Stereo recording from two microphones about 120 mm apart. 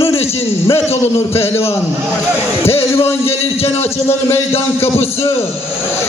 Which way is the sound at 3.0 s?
55° left (ahead or behind).